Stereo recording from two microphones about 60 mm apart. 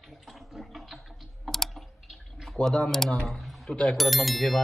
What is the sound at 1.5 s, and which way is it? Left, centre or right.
Typing, centre.